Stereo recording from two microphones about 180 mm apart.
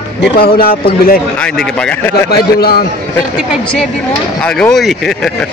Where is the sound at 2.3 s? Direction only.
55° left (ahead or behind).